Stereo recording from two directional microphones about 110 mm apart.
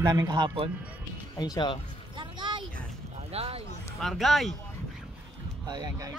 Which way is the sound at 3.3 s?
65° right (ahead or behind).